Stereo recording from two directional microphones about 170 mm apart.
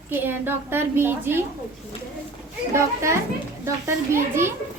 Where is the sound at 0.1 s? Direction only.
10° right (ahead or behind).